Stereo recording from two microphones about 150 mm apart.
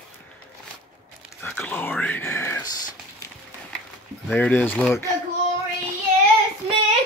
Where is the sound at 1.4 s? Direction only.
10° left (ahead or behind).